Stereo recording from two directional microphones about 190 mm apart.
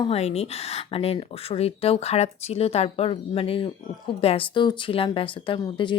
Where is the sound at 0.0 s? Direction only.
35° left (ahead or behind).